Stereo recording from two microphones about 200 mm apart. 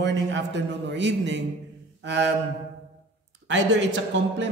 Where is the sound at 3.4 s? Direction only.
65° right (ahead or behind).